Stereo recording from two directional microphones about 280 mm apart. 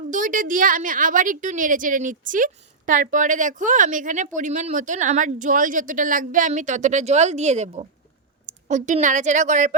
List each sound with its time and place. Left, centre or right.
0.1 s a woman's voice: right